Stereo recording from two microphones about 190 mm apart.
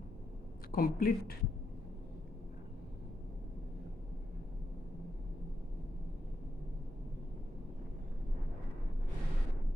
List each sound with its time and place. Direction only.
0.7 s speech: 50° left (ahead or behind)